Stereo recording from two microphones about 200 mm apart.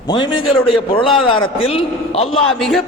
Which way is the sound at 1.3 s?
25° left (ahead or behind).